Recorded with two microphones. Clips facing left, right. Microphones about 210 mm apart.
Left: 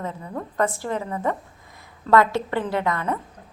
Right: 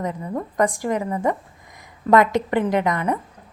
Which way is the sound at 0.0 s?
15° right (ahead or behind).